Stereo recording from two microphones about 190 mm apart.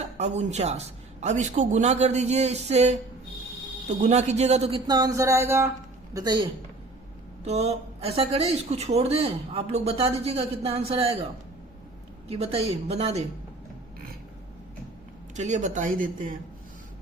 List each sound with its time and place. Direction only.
0.2 s speech: 35° right (ahead or behind)
4.9 s a sound: 20° right (ahead or behind)
6.1 s a man's voice: 20° right (ahead or behind)
7.4 s speech: 35° right (ahead or behind)
12.3 s speech: 30° right (ahead or behind)
15.4 s speech: 40° right (ahead or behind)